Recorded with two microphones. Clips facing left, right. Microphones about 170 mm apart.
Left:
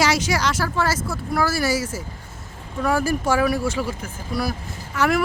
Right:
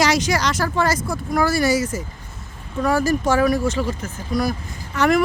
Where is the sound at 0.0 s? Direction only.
10° left (ahead or behind).